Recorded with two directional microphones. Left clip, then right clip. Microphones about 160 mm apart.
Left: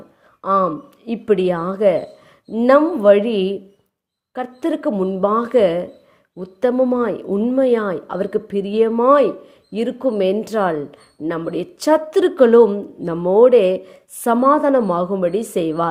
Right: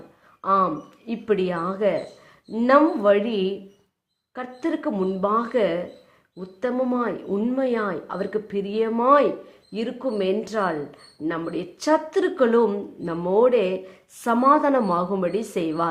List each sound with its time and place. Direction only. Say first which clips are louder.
0.4 s speech: left 3 dB; 35° left (ahead or behind)